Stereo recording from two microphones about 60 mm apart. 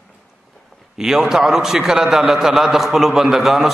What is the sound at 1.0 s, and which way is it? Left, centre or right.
A man's voice, centre.